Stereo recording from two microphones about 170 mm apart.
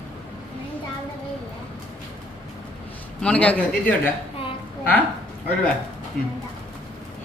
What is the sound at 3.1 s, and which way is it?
Speech, 5° left (ahead or behind).